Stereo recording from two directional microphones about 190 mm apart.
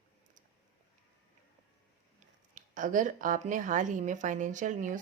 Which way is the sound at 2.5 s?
45° right (ahead or behind).